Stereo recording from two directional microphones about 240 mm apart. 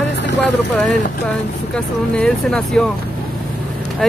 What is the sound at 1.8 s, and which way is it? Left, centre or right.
Speech, centre.